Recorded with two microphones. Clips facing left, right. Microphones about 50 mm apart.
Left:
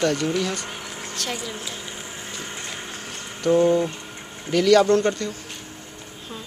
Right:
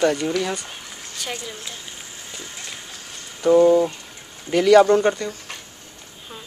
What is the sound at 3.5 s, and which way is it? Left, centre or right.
Speech, centre.